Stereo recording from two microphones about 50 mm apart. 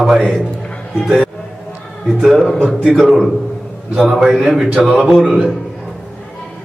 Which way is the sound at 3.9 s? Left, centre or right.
Centre.